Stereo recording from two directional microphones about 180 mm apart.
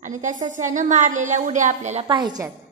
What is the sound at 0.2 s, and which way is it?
A woman's voice, 45° right (ahead or behind).